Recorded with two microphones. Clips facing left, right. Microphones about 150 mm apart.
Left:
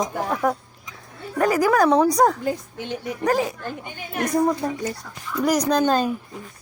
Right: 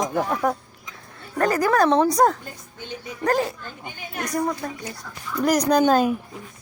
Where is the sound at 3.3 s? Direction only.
5° left (ahead or behind).